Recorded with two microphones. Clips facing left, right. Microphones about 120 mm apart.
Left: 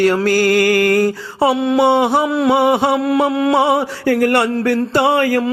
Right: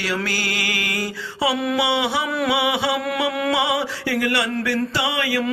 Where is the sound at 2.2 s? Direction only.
25° left (ahead or behind).